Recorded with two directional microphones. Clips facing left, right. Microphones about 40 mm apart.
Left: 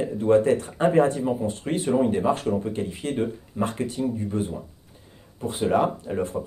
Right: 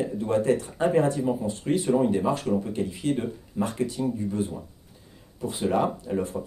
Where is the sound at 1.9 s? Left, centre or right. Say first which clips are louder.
Left 3 dB; left.